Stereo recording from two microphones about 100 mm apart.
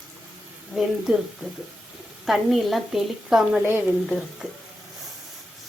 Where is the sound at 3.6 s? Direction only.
20° right (ahead or behind).